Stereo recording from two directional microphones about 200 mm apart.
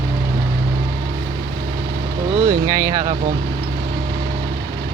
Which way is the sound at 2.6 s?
20° right (ahead or behind).